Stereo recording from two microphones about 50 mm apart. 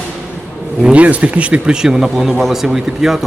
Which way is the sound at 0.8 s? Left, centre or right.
Right.